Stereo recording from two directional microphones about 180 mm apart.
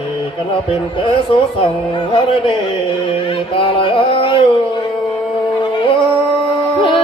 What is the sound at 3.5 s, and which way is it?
Music, 30° left (ahead or behind).